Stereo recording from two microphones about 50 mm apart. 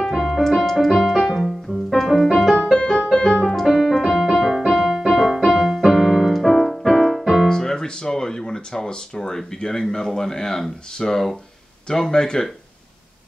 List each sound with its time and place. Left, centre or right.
0.0 s keyboard: centre
1.7 s music: centre
2.8 s music: left
3.4 s keyboard: centre
3.9 s music: centre
7.4 s speech: centre